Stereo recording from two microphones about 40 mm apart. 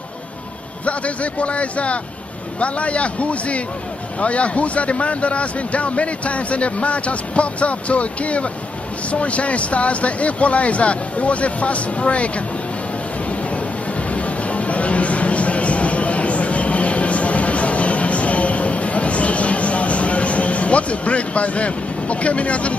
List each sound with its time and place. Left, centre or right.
0.8 s speech: left
14.1 s music: left